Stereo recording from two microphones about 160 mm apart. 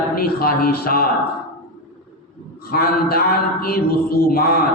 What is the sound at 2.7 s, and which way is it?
A man's voice, 70° left (ahead or behind).